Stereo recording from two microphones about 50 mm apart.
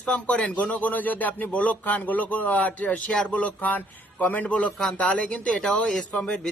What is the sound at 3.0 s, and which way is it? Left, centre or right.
Speech, centre.